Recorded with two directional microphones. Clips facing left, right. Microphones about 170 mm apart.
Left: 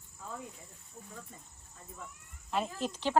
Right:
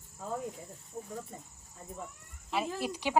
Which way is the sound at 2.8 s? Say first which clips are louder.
Left 1 dB; 10° right (ahead or behind).